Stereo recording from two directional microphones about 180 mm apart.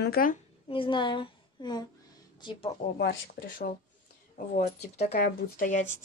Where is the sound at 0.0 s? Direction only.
55° left (ahead or behind).